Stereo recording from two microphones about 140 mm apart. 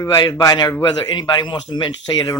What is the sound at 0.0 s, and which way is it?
A man's voice, 25° left (ahead or behind).